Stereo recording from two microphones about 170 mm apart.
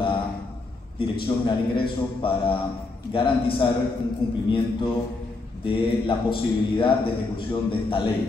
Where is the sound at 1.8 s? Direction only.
30° left (ahead or behind).